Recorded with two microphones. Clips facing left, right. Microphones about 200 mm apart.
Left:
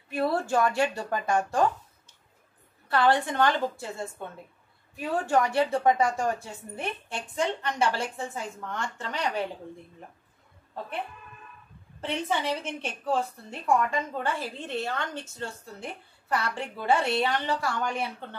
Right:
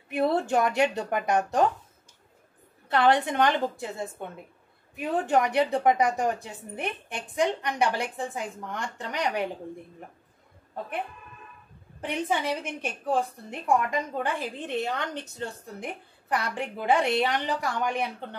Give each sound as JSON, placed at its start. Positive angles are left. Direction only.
{"t": 0.1, "sound": "speech", "side_deg": -20}
{"t": 2.9, "sound": "a woman's voice", "side_deg": -20}
{"t": 12.0, "sound": "a woman's voice", "side_deg": -15}